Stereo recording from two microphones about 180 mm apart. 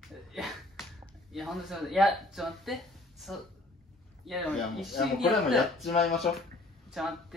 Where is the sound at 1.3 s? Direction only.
Centre (ahead or behind).